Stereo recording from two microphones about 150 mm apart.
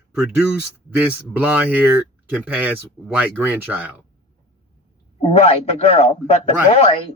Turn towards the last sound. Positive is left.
turn(degrees=40)  # may be behind; listen again after turning